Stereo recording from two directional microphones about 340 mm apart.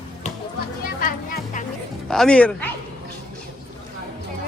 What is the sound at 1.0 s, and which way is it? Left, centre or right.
Music, left.